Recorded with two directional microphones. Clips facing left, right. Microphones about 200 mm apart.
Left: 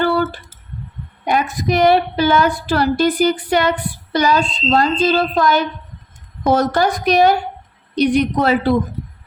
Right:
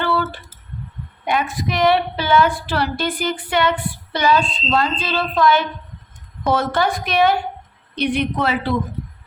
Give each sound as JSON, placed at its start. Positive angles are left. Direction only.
{"t": 1.2, "sound": "a woman's voice", "side_deg": 40}